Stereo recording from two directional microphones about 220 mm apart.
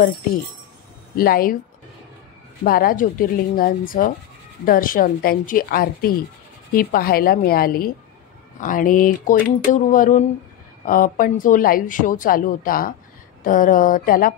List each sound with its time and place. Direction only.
1.1 s a woman's voice: 40° left (ahead or behind)
2.6 s a woman's voice: 40° left (ahead or behind)